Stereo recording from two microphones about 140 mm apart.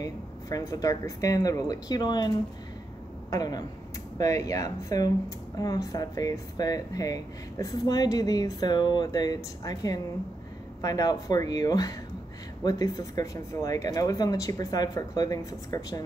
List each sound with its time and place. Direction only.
0.0 s speech: 25° left (ahead or behind)